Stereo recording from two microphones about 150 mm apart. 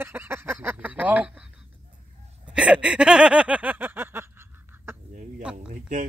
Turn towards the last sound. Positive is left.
turn(degrees=-60)  # may be behind; listen again after turning